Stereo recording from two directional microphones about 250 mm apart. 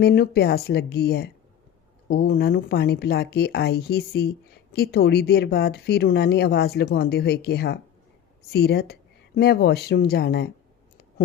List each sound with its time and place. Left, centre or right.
0.0 s speech: left